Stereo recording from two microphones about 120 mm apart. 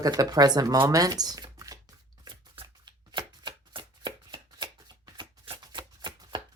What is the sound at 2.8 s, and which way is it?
Shuffling cards, 40° right (ahead or behind).